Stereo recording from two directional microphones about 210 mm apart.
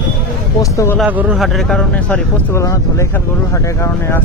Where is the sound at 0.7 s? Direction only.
10° left (ahead or behind).